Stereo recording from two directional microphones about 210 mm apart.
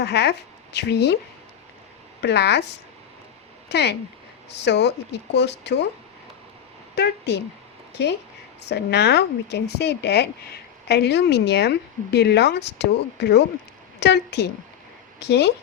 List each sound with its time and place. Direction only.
0.0 s speech: 55° left (ahead or behind)
2.2 s speech: 55° left (ahead or behind)
6.9 s speech: 55° left (ahead or behind)